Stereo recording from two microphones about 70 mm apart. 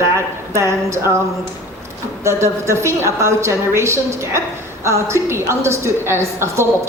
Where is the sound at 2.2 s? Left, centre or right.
Right.